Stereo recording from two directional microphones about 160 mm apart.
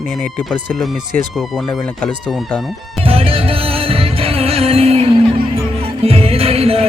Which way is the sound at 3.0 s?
35° right (ahead or behind).